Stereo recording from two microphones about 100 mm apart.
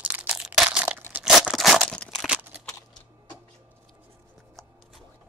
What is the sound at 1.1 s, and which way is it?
Tearing, 5° right (ahead or behind).